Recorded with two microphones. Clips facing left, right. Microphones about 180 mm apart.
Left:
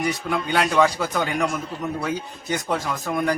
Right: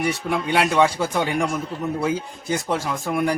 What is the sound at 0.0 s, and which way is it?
Speech, 25° right (ahead or behind).